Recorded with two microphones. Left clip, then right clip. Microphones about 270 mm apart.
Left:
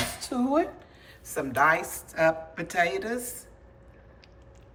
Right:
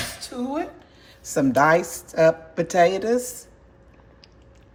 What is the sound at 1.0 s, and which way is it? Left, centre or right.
A woman's voice, centre.